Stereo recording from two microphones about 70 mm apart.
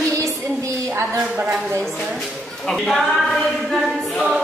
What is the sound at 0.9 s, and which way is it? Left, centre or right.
Speech, right.